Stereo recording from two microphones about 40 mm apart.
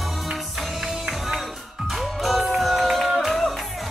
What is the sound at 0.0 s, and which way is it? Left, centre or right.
Music, centre.